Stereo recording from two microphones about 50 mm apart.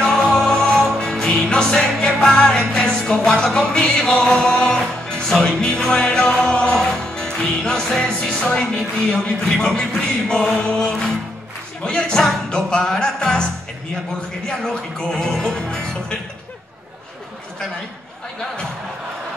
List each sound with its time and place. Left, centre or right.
0.0 s music: centre
9.5 s speech: centre
9.8 s music: centre
14.6 s music: centre